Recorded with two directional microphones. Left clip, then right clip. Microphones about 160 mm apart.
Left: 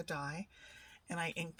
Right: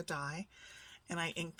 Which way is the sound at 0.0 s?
35° right (ahead or behind).